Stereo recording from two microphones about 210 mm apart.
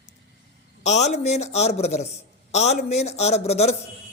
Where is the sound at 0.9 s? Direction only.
30° left (ahead or behind).